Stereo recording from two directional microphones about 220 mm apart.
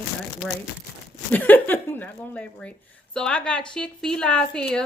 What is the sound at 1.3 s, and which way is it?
A woman's voice, 10° left (ahead or behind).